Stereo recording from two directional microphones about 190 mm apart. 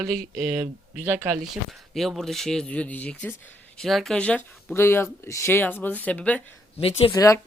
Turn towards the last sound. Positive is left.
turn(degrees=15)  # may be behind; listen again after turning